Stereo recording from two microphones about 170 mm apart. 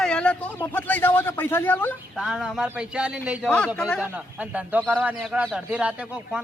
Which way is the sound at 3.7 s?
5° left (ahead or behind).